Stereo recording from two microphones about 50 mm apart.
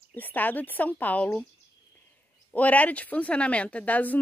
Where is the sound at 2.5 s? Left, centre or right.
Left.